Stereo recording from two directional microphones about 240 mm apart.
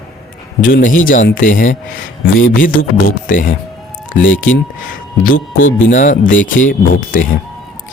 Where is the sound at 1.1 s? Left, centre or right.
Left.